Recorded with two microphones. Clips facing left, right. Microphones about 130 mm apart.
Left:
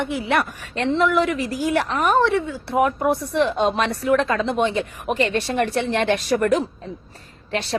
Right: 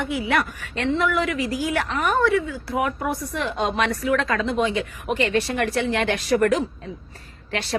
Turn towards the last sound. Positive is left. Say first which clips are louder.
# left 3 dB
turn(degrees=25)  # may be behind; listen again after turning